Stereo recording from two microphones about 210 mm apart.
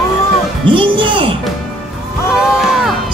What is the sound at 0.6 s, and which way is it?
Music, 25° right (ahead or behind).